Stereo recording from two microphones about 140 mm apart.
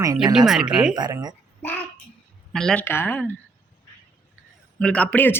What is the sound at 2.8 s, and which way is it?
Speech, 15° left (ahead or behind).